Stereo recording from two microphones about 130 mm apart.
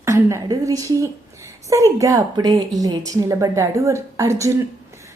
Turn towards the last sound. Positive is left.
turn(degrees=-25)  # may be behind; listen again after turning